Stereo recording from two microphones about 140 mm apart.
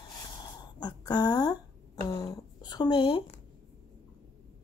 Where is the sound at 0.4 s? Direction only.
30° left (ahead or behind).